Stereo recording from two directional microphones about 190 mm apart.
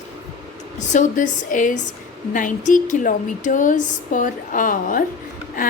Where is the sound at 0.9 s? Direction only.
40° left (ahead or behind).